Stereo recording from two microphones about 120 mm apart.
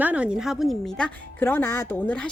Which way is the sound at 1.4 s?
15° left (ahead or behind).